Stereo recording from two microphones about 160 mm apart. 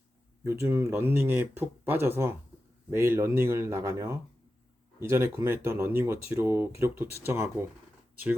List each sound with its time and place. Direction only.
0.4 s speech: 15° right (ahead or behind)